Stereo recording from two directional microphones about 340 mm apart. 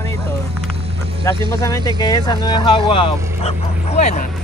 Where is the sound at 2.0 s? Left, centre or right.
Centre.